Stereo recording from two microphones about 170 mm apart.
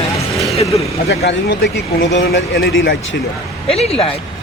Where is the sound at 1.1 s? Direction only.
90° left.